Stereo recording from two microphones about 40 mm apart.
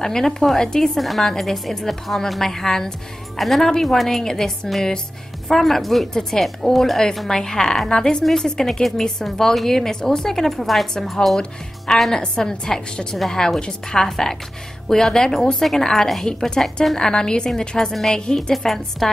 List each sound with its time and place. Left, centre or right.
0.0 s a woman's voice: centre
0.9 s a woman's voice: centre
5.5 s a woman's voice: centre
16.3 s a woman's voice: centre
17.5 s speech: centre
18.1 s a woman's voice: centre
18.5 s speech: centre